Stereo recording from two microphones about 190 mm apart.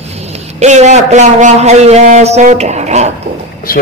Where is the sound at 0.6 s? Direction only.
40° right (ahead or behind).